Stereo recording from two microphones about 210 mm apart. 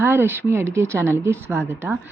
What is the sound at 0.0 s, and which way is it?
A woman's voice, 10° right (ahead or behind).